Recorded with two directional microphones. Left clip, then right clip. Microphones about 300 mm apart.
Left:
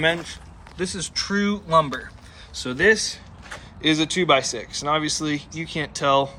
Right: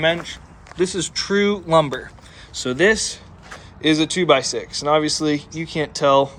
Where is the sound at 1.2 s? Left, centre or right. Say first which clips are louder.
Right 7 dB; centre.